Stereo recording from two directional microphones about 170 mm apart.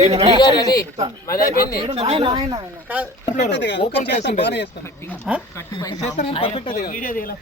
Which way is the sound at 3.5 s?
90° left.